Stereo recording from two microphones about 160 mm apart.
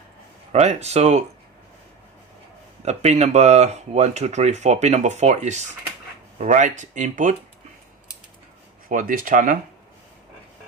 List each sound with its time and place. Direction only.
0.5 s speech: 45° right (ahead or behind)
2.8 s speech: 45° right (ahead or behind)
8.9 s speech: 55° right (ahead or behind)